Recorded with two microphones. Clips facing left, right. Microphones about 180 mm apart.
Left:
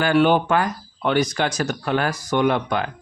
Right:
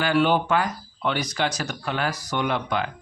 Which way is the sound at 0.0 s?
50° left (ahead or behind).